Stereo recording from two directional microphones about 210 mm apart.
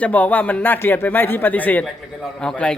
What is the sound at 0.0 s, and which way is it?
Speech, 10° left (ahead or behind).